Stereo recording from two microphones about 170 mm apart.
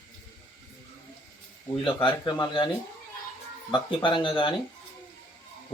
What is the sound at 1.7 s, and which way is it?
Speech, 30° left (ahead or behind).